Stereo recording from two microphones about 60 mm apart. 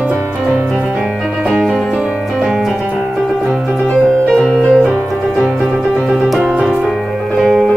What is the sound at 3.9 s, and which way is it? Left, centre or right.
Music, centre.